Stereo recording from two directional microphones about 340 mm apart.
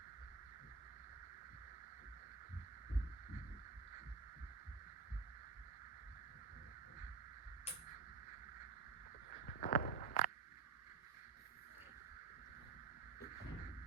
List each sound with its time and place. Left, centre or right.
9.5 s walk: left